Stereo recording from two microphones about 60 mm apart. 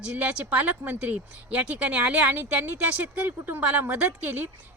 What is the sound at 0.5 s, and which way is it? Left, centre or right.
Speech, right.